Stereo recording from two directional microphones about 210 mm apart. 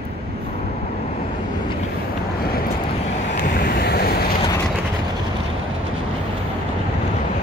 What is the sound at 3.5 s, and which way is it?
Waves, 45° left (ahead or behind).